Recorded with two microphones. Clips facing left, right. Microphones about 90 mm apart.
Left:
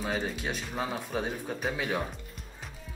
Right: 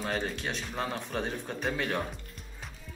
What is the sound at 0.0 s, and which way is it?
Speech, 5° left (ahead or behind).